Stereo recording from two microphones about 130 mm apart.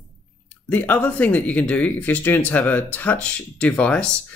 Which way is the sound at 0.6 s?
15° left (ahead or behind).